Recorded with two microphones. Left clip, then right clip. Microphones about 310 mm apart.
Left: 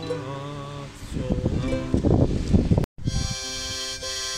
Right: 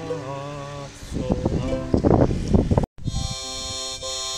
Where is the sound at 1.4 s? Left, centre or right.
Right.